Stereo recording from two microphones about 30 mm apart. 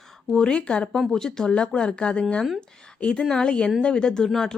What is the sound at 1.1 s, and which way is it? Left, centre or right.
Speech, centre.